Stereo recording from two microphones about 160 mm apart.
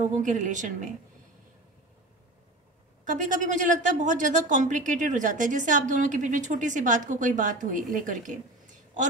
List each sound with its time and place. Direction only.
0.0 s a woman's voice: 50° right (ahead or behind)
3.1 s a woman's voice: 50° right (ahead or behind)